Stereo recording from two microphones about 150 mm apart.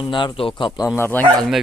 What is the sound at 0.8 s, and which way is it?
Speech, 15° left (ahead or behind).